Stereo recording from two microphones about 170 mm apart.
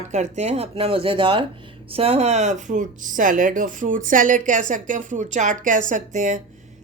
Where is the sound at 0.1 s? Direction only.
40° right (ahead or behind).